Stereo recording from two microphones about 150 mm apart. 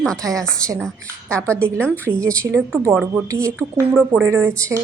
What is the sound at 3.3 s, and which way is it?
A woman's voice, 20° right (ahead or behind).